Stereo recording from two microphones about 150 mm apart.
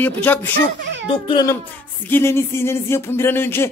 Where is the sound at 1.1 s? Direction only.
35° left (ahead or behind).